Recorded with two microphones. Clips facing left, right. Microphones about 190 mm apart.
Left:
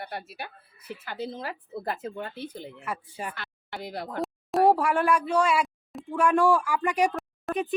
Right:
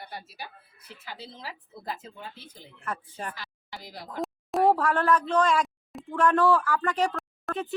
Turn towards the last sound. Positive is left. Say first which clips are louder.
# left 4 dB
turn(degrees=15)  # may be behind; listen again after turning